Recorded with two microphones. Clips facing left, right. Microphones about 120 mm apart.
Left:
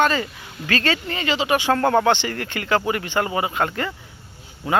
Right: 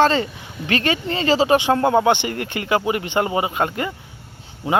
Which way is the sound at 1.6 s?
20° right (ahead or behind).